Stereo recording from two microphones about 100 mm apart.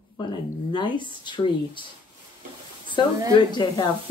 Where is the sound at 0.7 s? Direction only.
50° left (ahead or behind).